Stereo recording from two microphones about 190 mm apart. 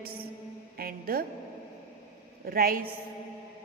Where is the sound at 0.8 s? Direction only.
50° right (ahead or behind).